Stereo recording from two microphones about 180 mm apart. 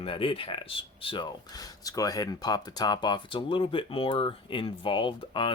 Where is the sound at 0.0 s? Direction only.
30° left (ahead or behind).